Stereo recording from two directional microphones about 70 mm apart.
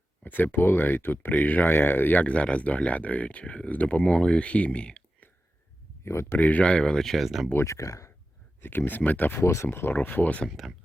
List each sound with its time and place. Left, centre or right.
0.3 s speech: left
6.1 s speech: left
6.4 s speech: centre
7.6 s speech: left
8.6 s speech: left
9.4 s speech: left
9.6 s speech: left